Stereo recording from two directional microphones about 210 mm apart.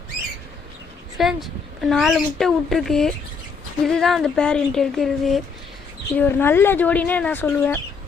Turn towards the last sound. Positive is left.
turn(degrees=10)  # may be behind; listen again after turning